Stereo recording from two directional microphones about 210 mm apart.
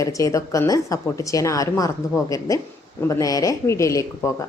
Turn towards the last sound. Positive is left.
turn(degrees=15)  # may be behind; listen again after turning